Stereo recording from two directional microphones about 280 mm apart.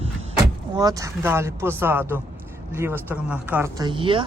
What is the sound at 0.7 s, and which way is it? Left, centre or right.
Speech, centre.